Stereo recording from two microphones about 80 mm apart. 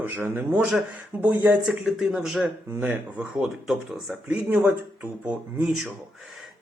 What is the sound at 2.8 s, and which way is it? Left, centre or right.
Speech, centre.